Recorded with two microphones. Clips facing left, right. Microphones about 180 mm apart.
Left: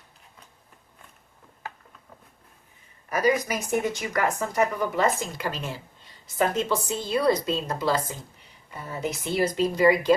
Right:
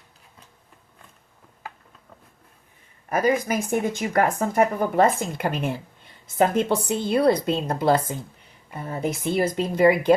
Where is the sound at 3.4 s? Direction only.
50° right (ahead or behind).